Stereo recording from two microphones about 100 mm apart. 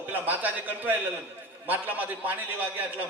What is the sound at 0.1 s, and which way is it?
A man's voice, 15° right (ahead or behind).